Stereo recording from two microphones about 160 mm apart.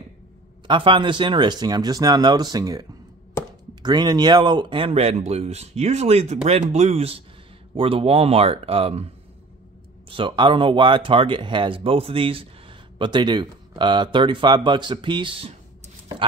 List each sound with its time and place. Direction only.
0.7 s speech: 30° right (ahead or behind)